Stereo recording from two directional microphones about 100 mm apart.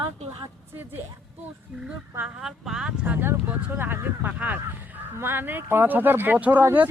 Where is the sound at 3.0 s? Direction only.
20° right (ahead or behind).